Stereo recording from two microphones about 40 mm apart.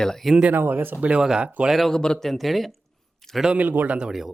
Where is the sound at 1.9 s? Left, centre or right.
Centre.